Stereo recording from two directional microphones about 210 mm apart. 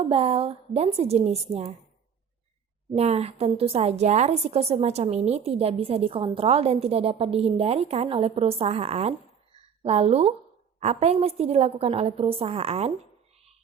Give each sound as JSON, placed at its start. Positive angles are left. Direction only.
{"t": 0.1, "sound": "a woman's voice", "side_deg": -30}
{"t": 2.9, "sound": "a woman's voice", "side_deg": -30}